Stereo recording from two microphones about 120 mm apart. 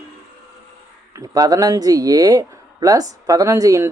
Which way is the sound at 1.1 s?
30° right (ahead or behind).